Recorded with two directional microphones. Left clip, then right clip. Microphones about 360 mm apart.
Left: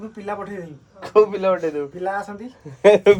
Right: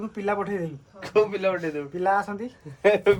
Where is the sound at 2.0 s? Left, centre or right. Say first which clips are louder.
Right 7 dB; centre.